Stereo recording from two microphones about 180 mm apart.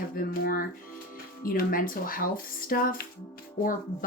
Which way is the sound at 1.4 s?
50° left (ahead or behind).